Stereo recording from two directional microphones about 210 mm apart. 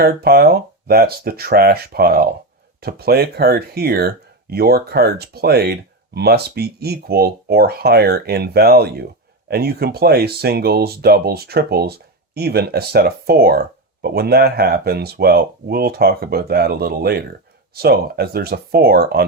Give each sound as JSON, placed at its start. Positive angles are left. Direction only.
{"t": 0.0, "sound": "speech", "side_deg": -45}